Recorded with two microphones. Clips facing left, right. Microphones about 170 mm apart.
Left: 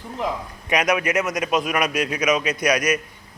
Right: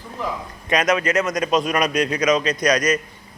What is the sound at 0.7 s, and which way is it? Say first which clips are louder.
A man's voice: right 1 dB; 10° left (ahead or behind).